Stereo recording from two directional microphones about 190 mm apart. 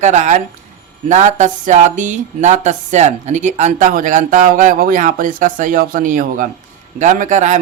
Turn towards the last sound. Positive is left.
turn(degrees=-40)  # may be behind; listen again after turning